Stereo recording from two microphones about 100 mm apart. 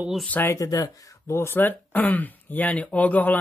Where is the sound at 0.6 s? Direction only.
35° left (ahead or behind).